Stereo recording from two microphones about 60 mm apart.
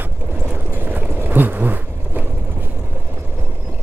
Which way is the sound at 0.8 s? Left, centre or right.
Right.